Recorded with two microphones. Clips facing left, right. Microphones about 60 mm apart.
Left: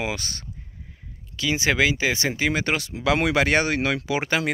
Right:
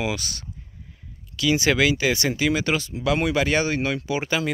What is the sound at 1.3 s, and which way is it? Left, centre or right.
Speech, left.